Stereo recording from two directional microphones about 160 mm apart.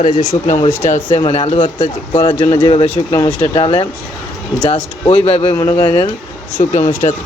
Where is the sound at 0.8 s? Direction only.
50° left (ahead or behind).